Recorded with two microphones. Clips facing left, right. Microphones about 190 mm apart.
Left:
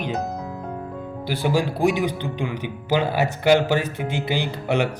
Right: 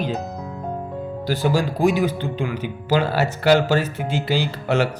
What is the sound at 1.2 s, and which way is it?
Speech, 15° left (ahead or behind).